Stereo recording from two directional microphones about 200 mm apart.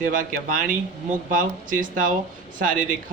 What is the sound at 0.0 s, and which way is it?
A man's voice, 40° right (ahead or behind).